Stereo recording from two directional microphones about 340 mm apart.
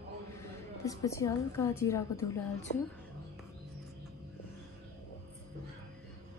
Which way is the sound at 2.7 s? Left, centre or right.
Left.